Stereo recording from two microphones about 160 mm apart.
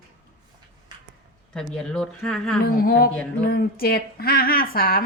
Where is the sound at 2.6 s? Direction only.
65° left (ahead or behind).